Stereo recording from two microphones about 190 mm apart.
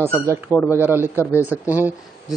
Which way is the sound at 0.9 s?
10° right (ahead or behind).